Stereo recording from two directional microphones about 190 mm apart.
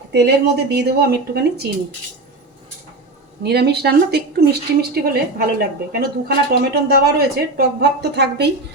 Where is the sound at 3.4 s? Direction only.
55° right (ahead or behind).